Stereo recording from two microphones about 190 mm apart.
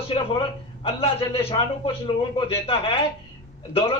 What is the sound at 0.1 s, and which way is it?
A man's voice, 30° left (ahead or behind).